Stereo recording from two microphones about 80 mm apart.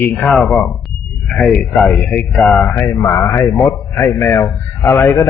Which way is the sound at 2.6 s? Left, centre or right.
Left.